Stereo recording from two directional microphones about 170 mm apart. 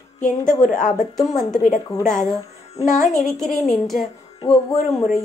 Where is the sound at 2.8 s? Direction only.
45° left (ahead or behind).